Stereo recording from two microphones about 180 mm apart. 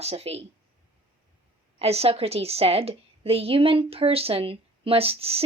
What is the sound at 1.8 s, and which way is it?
A woman's voice, 35° right (ahead or behind).